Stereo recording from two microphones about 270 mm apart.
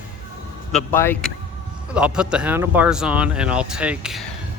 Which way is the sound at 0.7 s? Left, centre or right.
Centre.